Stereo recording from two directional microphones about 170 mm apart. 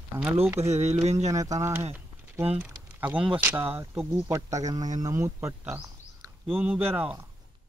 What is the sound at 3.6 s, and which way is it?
Speech, 30° right (ahead or behind).